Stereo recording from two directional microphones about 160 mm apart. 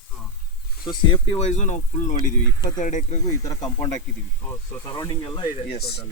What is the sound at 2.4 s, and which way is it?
Speech, 25° left (ahead or behind).